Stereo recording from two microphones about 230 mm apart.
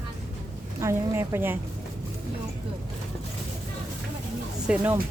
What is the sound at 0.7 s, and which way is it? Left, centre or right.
Speech, centre.